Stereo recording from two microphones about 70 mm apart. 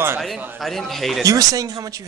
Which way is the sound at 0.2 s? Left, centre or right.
Centre.